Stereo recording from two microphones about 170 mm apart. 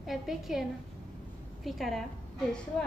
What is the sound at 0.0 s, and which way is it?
A woman's voice, centre (ahead or behind).